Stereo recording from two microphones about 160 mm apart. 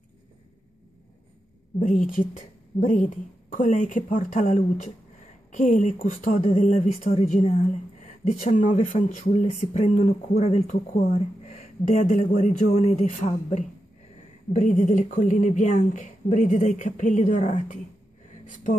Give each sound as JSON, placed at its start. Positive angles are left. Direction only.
{"t": 2.8, "sound": "speech", "side_deg": 50}